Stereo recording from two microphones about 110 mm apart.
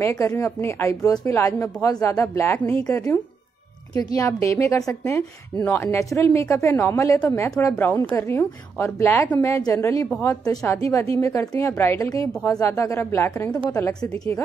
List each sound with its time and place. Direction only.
0.0 s speech: 25° left (ahead or behind)
4.2 s a woman's voice: 30° left (ahead or behind)